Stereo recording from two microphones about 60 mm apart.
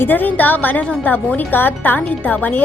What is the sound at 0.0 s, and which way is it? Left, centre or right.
Speech, left.